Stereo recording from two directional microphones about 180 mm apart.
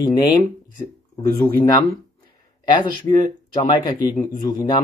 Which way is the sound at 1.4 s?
25° left (ahead or behind).